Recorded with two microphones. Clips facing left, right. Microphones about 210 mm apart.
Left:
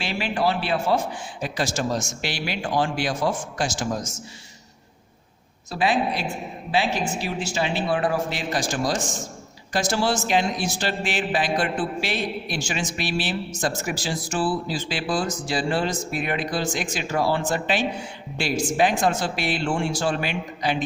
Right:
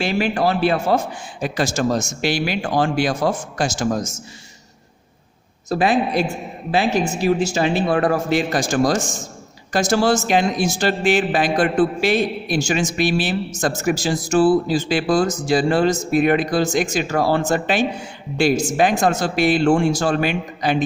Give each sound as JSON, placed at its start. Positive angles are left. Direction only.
{"t": 0.0, "sound": "a man's voice", "side_deg": -45}
{"t": 2.4, "sound": "speech", "side_deg": -60}
{"t": 2.8, "sound": "a man's voice", "side_deg": -45}
{"t": 5.6, "sound": "a man's voice", "side_deg": -45}